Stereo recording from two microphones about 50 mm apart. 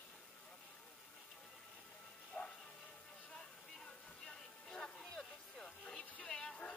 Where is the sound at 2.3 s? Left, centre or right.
Left.